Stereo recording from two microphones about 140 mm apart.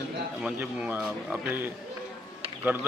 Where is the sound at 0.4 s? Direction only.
10° right (ahead or behind).